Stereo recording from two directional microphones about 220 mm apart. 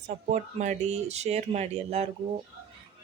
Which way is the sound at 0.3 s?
35° right (ahead or behind).